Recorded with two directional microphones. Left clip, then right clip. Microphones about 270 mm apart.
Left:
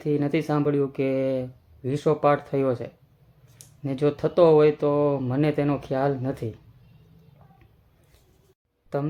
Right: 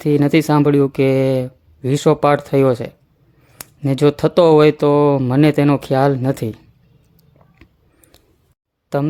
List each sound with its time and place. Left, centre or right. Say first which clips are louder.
0.0 s speech: right 10 dB; right
8.9 s speech: right 9 dB; right